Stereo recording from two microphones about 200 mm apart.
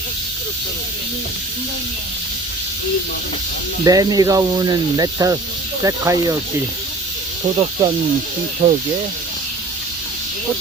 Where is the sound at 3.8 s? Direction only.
20° right (ahead or behind).